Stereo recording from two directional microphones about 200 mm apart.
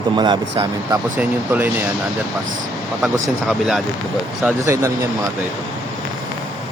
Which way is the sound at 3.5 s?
Centre (ahead or behind).